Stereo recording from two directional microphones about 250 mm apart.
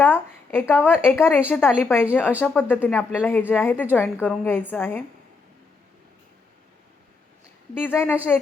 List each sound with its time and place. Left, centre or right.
0.0 s speech: centre
7.8 s speech: centre